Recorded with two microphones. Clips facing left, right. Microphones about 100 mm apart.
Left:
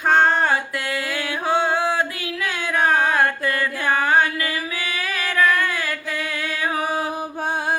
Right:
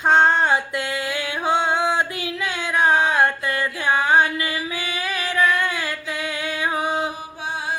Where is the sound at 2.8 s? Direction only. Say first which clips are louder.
Right 1 dB; 50° left (ahead or behind).